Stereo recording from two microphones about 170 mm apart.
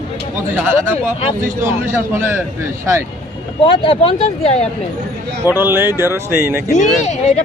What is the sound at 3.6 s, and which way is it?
Speech, 30° left (ahead or behind).